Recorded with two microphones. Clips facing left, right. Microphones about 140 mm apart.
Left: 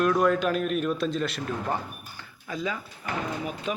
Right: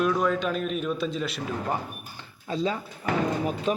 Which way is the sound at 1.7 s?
15° right (ahead or behind).